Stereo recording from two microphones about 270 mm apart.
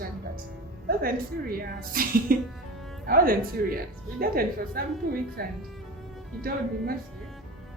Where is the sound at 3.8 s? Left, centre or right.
Right.